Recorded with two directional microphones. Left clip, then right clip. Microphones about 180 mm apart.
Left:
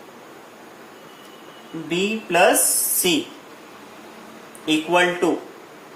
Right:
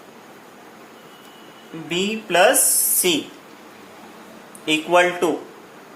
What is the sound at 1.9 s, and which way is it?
Speech, 40° right (ahead or behind).